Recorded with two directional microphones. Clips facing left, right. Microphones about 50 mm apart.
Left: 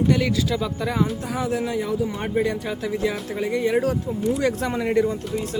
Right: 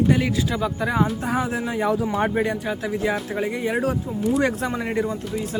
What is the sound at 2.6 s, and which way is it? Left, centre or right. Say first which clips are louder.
Speech: right 1 dB; centre.